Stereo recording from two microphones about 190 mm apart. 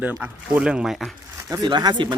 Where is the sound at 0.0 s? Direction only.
5° right (ahead or behind).